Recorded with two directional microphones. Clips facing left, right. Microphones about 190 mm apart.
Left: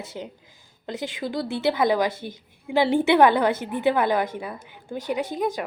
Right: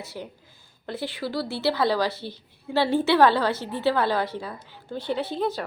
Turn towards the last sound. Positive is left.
turn(degrees=10)  # may be behind; listen again after turning